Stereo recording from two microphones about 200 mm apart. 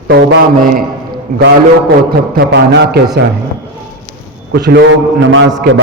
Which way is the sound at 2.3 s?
55° right (ahead or behind).